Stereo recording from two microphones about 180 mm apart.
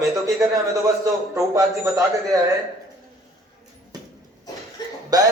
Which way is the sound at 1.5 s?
20° right (ahead or behind).